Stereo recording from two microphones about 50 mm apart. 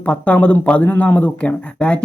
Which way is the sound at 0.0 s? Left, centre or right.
Left.